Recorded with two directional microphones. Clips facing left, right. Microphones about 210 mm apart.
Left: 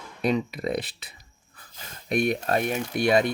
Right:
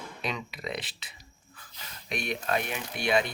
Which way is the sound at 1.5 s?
50° left (ahead or behind).